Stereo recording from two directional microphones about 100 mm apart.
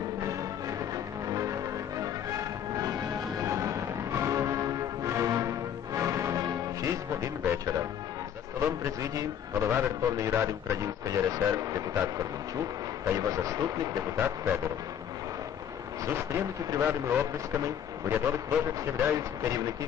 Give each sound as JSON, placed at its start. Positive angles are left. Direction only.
{"t": 0.9, "sound": "music", "side_deg": -35}
{"t": 7.6, "sound": "a man's voice", "side_deg": -35}
{"t": 14.2, "sound": "speech", "side_deg": -25}
{"t": 16.0, "sound": "speech", "side_deg": -25}